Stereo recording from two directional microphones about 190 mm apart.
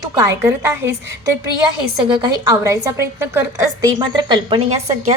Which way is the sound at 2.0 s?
25° right (ahead or behind).